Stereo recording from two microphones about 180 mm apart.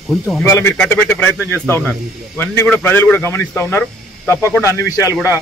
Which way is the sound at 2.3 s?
10° left (ahead or behind).